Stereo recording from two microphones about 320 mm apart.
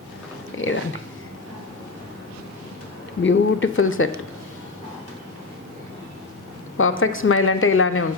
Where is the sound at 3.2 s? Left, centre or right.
Left.